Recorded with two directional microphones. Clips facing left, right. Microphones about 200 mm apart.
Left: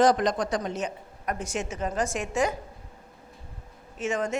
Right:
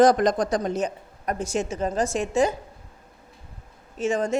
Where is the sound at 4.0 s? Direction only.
30° right (ahead or behind).